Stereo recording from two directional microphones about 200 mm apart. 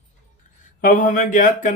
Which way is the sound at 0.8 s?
40° left (ahead or behind).